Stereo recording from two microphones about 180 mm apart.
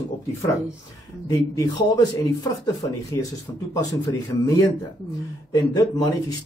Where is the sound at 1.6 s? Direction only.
20° left (ahead or behind).